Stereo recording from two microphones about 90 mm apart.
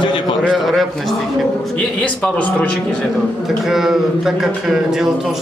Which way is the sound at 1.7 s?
15° left (ahead or behind).